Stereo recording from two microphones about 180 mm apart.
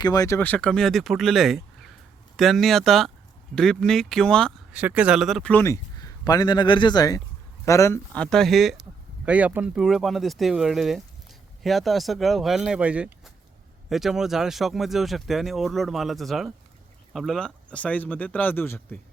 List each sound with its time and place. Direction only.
0.0 s speech: 20° left (ahead or behind)
4.7 s a man's voice: 10° right (ahead or behind); by 18.9 s 10° left (ahead or behind)